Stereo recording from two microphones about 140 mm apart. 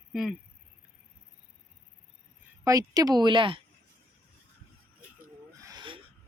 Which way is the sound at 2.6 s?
25° right (ahead or behind).